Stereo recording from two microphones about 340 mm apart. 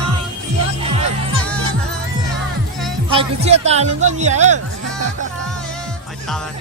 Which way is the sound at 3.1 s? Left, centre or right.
Centre.